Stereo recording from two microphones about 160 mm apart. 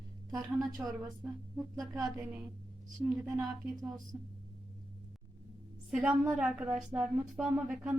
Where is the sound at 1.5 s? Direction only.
Centre (ahead or behind).